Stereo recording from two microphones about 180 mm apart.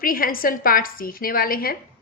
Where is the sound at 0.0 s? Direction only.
50° left (ahead or behind).